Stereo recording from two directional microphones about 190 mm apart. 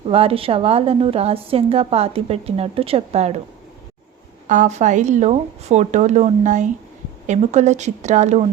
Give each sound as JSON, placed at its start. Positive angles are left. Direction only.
{"t": 0.1, "sound": "a woman's voice", "side_deg": -30}
{"t": 4.4, "sound": "a woman's voice", "side_deg": -40}